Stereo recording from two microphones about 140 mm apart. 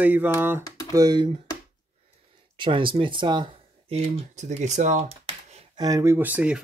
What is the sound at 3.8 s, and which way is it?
Speech, 45° right (ahead or behind).